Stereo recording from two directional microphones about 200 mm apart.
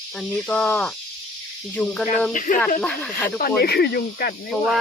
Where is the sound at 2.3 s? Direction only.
40° left (ahead or behind).